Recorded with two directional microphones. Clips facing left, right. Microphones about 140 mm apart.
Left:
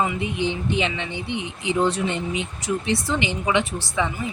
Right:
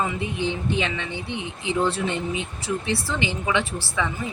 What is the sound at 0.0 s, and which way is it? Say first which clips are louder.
Speech: left 2 dB; 15° left (ahead or behind).